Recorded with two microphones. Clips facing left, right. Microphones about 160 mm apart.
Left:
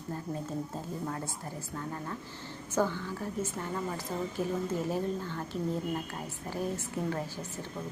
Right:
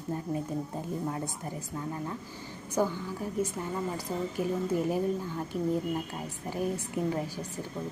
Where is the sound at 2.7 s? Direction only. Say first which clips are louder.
Right 1 dB; 15° right (ahead or behind).